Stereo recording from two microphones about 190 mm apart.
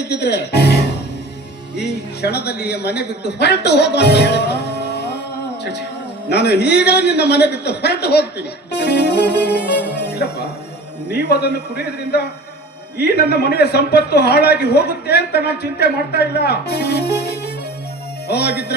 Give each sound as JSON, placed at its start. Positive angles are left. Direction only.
{"t": 0.1, "sound": "music", "side_deg": 60}
{"t": 1.7, "sound": "a man's voice", "side_deg": 60}
{"t": 6.2, "sound": "a man's voice", "side_deg": 60}
{"t": 13.0, "sound": "a man's voice", "side_deg": 60}